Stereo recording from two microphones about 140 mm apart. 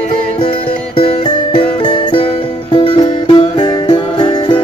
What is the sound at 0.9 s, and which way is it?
Music, 40° left (ahead or behind).